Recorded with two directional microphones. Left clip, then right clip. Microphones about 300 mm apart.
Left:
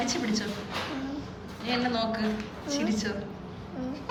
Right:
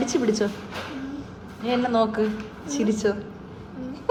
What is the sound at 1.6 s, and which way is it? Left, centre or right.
A woman's voice, centre.